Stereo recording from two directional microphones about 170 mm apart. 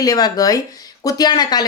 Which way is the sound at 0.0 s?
20° left (ahead or behind).